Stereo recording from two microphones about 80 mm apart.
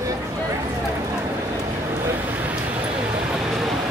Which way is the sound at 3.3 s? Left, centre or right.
Centre.